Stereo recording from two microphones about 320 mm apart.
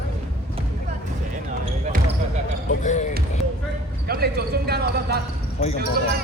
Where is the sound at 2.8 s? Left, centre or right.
Left.